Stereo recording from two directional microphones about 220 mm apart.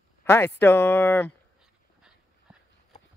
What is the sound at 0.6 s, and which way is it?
Speech, 10° left (ahead or behind).